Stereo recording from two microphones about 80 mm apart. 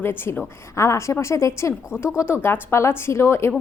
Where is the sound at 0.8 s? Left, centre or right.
Left.